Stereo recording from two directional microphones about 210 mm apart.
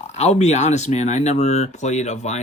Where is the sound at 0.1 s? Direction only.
30° left (ahead or behind).